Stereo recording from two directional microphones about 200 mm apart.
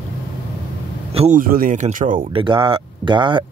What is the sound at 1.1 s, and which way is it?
Speech, 35° right (ahead or behind).